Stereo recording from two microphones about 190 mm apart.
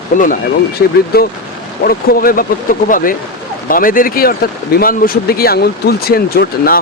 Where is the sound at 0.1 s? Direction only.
45° left (ahead or behind).